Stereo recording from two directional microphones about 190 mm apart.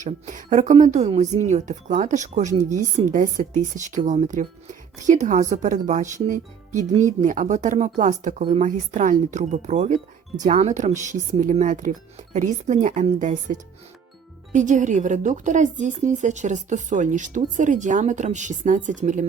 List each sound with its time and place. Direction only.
0.0 s speech: 40° right (ahead or behind)